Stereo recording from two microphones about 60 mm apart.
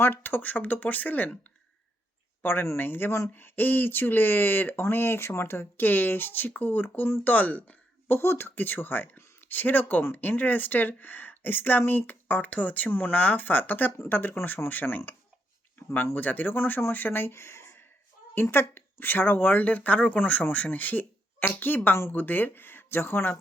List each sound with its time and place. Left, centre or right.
0.0 s speech: left
2.4 s a woman's voice: left
16.1 s a woman's voice: left